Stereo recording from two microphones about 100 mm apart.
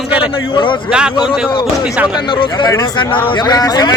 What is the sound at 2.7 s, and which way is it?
A man's voice, 40° left (ahead or behind).